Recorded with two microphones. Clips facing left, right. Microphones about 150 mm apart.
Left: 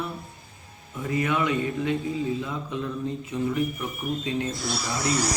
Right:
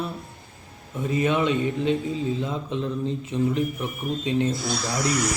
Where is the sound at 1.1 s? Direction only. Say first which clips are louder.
Right 3 dB; 25° right (ahead or behind).